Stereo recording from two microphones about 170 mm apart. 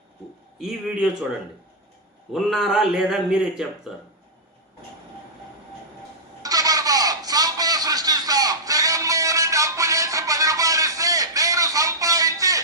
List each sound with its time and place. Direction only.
0.6 s a man's voice: centre (ahead or behind)
2.3 s a man's voice: centre (ahead or behind)
6.4 s a sound: 20° right (ahead or behind)